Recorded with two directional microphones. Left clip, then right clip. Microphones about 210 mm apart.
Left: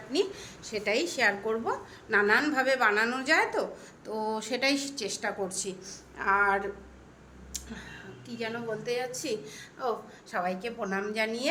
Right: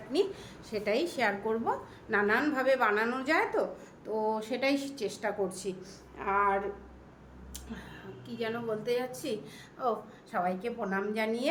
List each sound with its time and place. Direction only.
0.1 s a woman's voice: 5° right (ahead or behind)
8.3 s a woman's voice: 10° right (ahead or behind)